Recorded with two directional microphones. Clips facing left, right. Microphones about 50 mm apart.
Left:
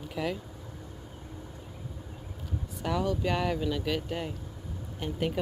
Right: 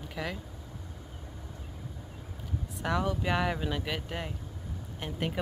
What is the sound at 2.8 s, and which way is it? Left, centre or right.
Speech, centre.